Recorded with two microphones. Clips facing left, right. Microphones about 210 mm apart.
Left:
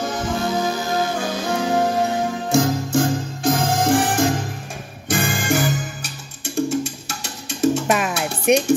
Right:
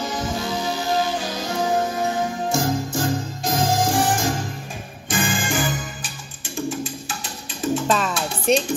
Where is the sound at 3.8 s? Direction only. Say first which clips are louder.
Left 3 dB; 60° left (ahead or behind).